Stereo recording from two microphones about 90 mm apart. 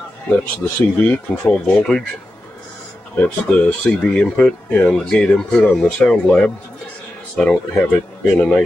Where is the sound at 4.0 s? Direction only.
10° left (ahead or behind).